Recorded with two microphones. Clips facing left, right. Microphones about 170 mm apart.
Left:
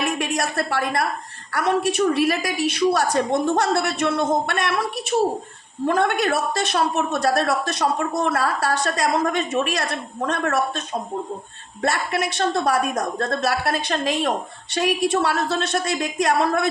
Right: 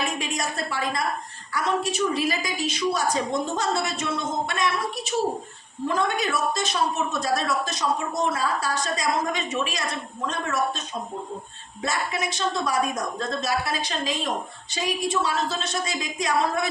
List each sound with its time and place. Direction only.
0.0 s a woman's voice: 65° left (ahead or behind)